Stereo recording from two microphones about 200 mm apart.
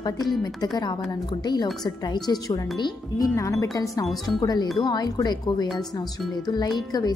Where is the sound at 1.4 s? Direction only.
20° left (ahead or behind).